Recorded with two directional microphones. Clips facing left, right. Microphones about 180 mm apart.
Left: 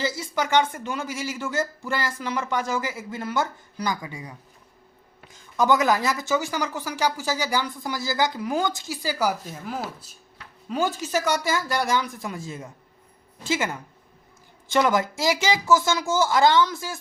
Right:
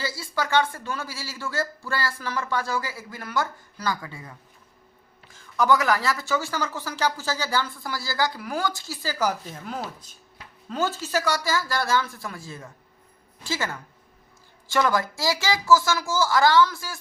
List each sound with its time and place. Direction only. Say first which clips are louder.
0.0 s speech: left 3 dB; 20° left (ahead or behind)